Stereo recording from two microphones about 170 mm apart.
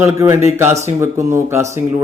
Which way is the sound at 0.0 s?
15° right (ahead or behind).